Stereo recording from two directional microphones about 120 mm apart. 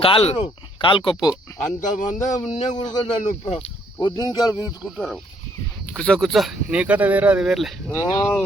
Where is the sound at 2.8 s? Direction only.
75° left (ahead or behind); by 3.7 s 60° left (ahead or behind).